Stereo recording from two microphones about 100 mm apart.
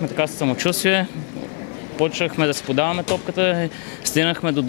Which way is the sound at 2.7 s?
15° left (ahead or behind).